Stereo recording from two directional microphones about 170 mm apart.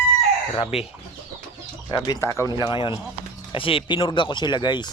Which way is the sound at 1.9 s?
20° left (ahead or behind).